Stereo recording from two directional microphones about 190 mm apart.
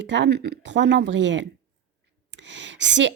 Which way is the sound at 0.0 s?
70° right (ahead or behind).